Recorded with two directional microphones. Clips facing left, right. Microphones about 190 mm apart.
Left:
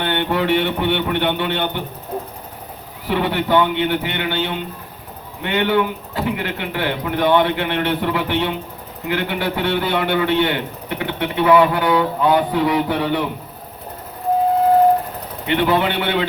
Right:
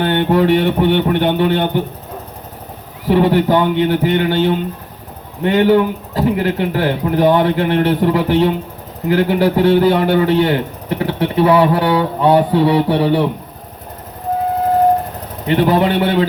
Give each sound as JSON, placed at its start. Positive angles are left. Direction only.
{"t": 0.0, "sound": "a man's voice", "side_deg": -40}
{"t": 3.1, "sound": "a man's voice", "side_deg": -40}
{"t": 15.4, "sound": "a man's voice", "side_deg": -40}